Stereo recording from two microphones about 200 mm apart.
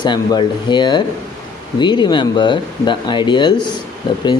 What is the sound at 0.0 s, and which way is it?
Speech, 20° left (ahead or behind).